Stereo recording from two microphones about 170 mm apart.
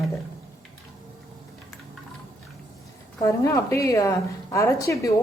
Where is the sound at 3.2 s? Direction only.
15° left (ahead or behind).